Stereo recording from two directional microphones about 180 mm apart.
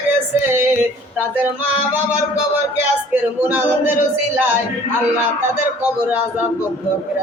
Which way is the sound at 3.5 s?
10° right (ahead or behind).